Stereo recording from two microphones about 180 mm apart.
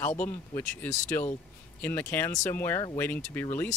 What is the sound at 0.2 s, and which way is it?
Speech, 10° left (ahead or behind).